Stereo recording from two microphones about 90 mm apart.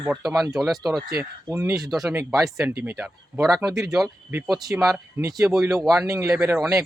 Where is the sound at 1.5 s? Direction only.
30° right (ahead or behind).